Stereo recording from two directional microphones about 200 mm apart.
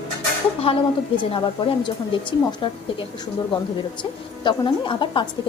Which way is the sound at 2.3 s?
25° left (ahead or behind).